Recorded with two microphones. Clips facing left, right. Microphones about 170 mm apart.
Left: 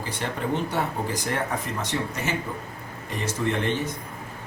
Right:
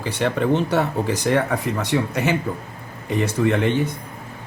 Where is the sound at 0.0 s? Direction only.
75° right (ahead or behind).